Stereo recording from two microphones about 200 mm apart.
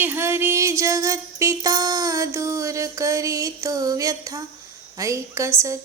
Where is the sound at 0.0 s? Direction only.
10° right (ahead or behind).